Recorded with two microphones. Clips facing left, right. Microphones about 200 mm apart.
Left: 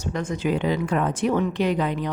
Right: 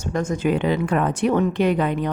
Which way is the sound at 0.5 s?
65° right (ahead or behind).